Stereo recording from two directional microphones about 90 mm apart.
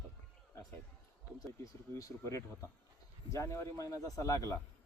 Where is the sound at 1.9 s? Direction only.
35° left (ahead or behind).